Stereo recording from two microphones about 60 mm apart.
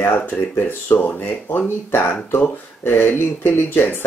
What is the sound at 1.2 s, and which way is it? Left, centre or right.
Speech, left.